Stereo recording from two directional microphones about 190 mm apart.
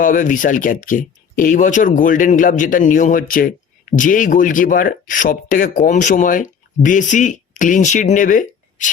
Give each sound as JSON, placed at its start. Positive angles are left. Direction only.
{"t": 0.0, "sound": "speech", "side_deg": 45}